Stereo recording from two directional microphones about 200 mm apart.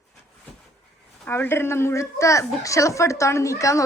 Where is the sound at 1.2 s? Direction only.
10° left (ahead or behind).